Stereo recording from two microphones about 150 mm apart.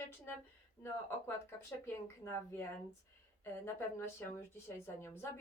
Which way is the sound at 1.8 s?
15° left (ahead or behind).